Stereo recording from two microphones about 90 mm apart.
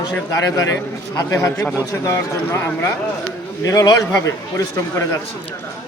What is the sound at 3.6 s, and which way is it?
A man's voice, 40° left (ahead or behind).